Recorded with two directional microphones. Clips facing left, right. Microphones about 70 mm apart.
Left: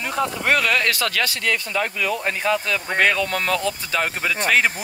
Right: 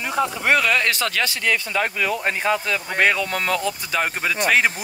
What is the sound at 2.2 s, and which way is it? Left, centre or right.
Speech, right.